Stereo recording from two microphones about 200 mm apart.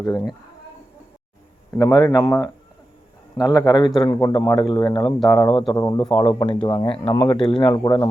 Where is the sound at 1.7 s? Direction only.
15° left (ahead or behind).